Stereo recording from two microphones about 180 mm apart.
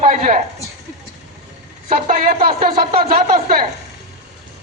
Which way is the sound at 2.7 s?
30° right (ahead or behind).